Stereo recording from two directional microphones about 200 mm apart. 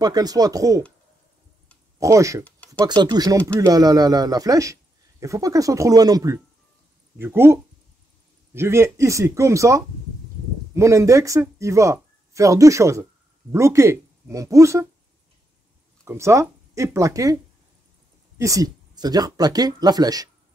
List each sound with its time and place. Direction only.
0.0 s speech: 20° right (ahead or behind)
2.0 s speech: 15° right (ahead or behind)
2.4 s a sound: 5° left (ahead or behind)
2.8 s speech: 20° right (ahead or behind)
16.1 s speech: 15° right (ahead or behind)
18.4 s speech: 15° right (ahead or behind)